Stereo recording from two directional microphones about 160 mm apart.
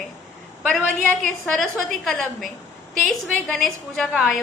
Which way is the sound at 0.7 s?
5° left (ahead or behind).